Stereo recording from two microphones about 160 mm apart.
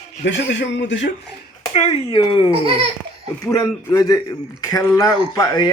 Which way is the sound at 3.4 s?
20° left (ahead or behind).